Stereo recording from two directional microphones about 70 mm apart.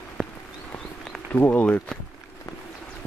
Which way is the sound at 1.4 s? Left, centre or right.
Left.